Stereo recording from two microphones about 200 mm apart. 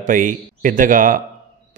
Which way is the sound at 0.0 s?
40° right (ahead or behind).